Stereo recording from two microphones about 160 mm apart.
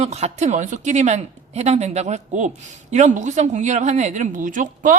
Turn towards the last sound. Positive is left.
turn(degrees=-55)  # may be behind; listen again after turning